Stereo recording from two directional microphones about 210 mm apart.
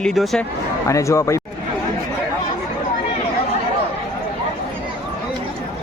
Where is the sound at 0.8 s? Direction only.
15° left (ahead or behind).